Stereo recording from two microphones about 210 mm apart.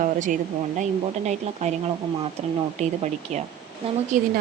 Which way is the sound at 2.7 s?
35° right (ahead or behind).